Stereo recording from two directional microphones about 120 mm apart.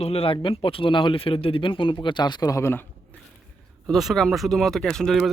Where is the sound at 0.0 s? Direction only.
55° left (ahead or behind); by 3.2 s 20° left (ahead or behind).